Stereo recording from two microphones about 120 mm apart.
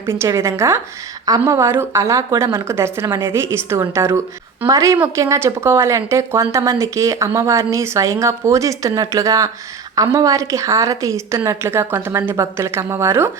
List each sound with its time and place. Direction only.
0.0 s speech: 20° right (ahead or behind)